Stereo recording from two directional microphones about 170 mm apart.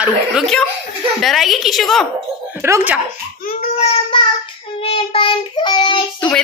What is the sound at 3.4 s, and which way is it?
Baby cry, 50° left (ahead or behind).